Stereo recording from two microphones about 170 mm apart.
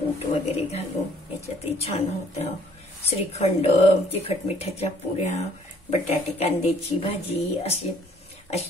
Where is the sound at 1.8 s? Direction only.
40° left (ahead or behind).